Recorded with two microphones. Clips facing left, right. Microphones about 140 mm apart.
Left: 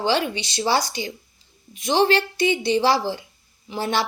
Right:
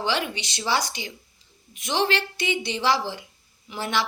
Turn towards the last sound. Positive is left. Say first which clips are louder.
# left 3 dB
turn(degrees=35)  # may be behind; listen again after turning